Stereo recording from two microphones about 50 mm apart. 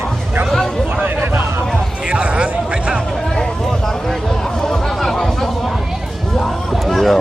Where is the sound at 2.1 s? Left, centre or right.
Right.